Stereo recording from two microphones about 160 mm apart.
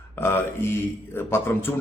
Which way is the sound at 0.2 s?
15° left (ahead or behind).